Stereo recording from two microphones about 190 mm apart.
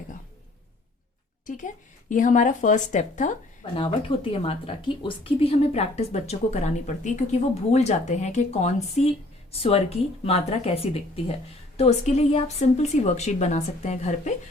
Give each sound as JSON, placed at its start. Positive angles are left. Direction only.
{"t": 1.5, "sound": "a woman's voice", "side_deg": 45}
{"t": 3.8, "sound": "a woman's voice", "side_deg": 25}